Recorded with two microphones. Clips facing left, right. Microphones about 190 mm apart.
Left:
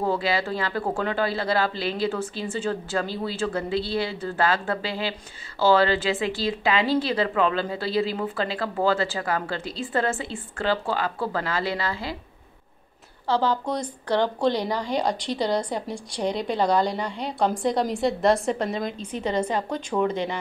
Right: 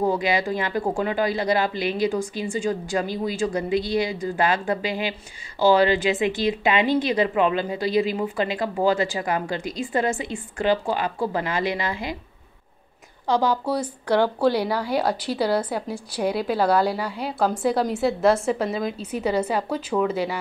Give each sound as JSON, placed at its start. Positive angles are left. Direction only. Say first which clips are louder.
{"t": 0.0, "sound": "speech", "louder": "right 2 dB", "side_deg": -15}
{"t": 13.3, "sound": "a woman's voice", "louder": "right 2 dB", "side_deg": -10}